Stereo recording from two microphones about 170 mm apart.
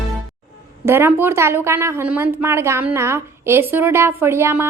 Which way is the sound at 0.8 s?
15° right (ahead or behind).